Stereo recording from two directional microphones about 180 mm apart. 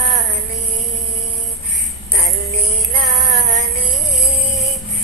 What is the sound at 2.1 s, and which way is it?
Music, 35° right (ahead or behind).